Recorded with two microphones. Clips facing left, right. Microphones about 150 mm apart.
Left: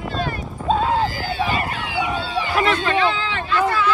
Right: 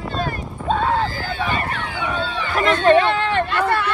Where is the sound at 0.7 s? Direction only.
35° left (ahead or behind).